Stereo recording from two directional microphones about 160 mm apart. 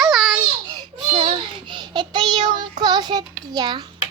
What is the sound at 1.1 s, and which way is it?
Child singing, 40° right (ahead or behind).